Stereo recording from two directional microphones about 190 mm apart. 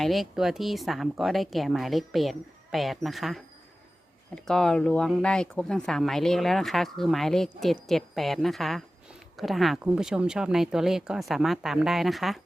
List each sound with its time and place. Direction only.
0.0 s speech: centre (ahead or behind)